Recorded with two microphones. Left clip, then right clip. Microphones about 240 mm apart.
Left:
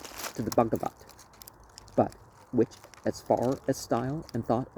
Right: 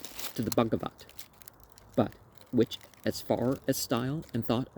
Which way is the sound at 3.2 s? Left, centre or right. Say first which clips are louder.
Left 3 dB; right.